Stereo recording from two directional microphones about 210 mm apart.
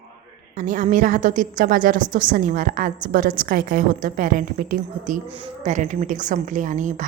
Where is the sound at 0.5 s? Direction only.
40° right (ahead or behind).